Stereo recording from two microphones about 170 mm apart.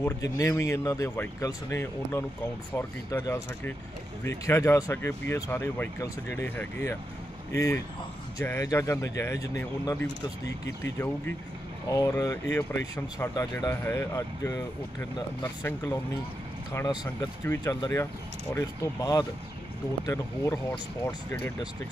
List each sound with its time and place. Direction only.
0.0 s speech: 20° left (ahead or behind)
17.5 s speech: 15° left (ahead or behind)